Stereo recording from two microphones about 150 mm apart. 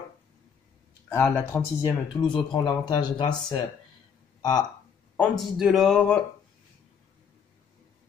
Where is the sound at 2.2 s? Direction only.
30° left (ahead or behind).